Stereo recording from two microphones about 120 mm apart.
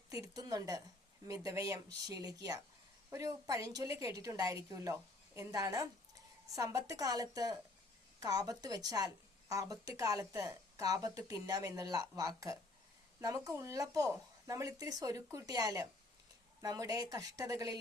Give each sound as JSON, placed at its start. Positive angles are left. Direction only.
{"t": 0.1, "sound": "a woman's voice", "side_deg": -30}